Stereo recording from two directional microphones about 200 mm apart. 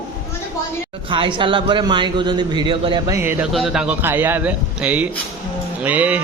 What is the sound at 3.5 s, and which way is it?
A man's voice, centre (ahead or behind).